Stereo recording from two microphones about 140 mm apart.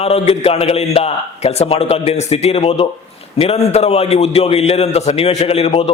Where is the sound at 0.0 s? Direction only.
45° left (ahead or behind).